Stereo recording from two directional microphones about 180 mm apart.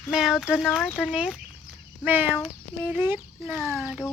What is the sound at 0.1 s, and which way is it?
Speech, 5° right (ahead or behind).